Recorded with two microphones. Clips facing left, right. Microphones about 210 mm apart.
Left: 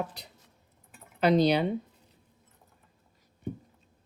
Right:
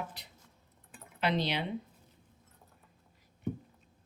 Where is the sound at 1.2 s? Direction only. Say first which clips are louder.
Left 9 dB; 40° left (ahead or behind).